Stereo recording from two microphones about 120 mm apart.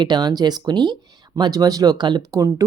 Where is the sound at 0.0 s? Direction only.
35° right (ahead or behind).